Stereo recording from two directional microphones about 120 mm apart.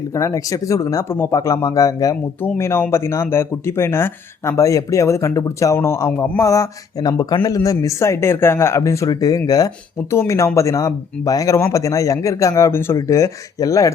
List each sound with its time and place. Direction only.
0.1 s speech: 25° left (ahead or behind)